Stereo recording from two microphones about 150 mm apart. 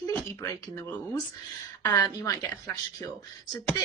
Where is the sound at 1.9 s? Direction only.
25° left (ahead or behind).